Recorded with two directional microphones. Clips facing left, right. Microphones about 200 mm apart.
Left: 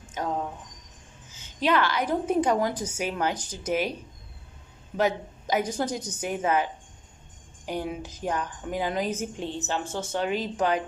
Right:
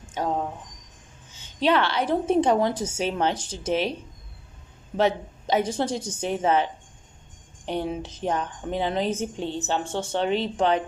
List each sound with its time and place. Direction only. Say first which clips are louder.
1.5 s a woman's voice: right 2 dB; 30° right (ahead or behind)
4.9 s a woman's voice: right 3 dB; 30° right (ahead or behind)